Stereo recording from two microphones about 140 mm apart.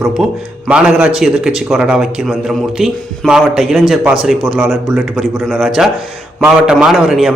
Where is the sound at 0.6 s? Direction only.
10° right (ahead or behind).